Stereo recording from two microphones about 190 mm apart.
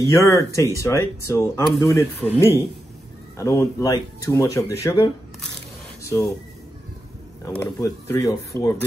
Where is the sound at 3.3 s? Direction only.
15° left (ahead or behind).